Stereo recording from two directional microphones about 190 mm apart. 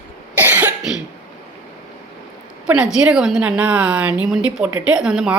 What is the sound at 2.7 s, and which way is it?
A woman's voice, 5° right (ahead or behind).